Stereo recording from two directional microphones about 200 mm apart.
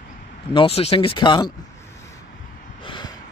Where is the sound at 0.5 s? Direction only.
30° left (ahead or behind).